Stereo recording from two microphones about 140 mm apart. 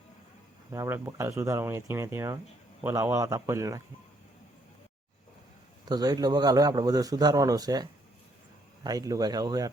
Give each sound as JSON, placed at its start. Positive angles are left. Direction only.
{"t": 0.7, "sound": "a man's voice", "side_deg": -20}
{"t": 5.8, "sound": "a man's voice", "side_deg": -30}